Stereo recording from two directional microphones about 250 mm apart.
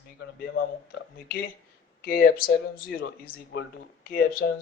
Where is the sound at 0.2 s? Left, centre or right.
Left.